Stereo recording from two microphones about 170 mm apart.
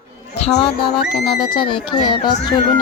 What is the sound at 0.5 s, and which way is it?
Speech, 30° left (ahead or behind).